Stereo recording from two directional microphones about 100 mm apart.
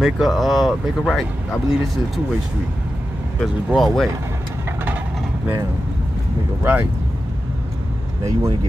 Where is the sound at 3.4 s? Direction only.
Centre (ahead or behind).